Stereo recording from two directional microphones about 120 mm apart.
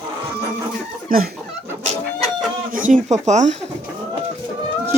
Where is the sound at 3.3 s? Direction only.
80° right.